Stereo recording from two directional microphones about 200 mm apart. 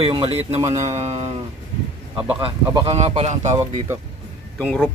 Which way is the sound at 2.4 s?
30° right (ahead or behind).